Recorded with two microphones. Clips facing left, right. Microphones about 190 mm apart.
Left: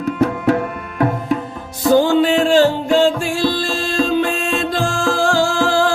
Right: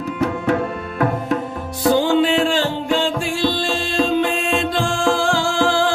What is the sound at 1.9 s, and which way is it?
Music, 45° left (ahead or behind).